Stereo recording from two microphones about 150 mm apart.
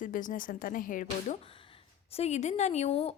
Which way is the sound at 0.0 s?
60° left (ahead or behind).